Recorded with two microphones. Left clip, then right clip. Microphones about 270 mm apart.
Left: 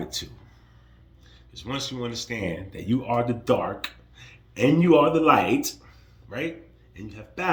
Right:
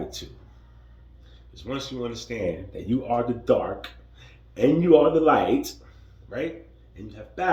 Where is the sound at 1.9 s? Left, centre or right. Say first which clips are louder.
Even; left.